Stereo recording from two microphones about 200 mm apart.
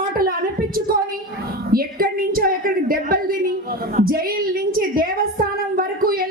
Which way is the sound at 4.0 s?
50° right (ahead or behind).